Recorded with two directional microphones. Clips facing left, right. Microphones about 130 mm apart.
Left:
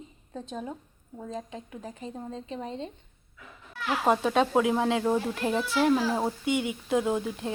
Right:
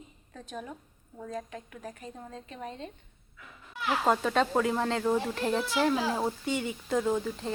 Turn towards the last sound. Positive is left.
turn(degrees=10)  # may be behind; listen again after turning